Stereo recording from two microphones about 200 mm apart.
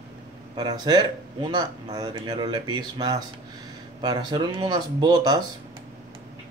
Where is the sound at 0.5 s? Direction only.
20° right (ahead or behind).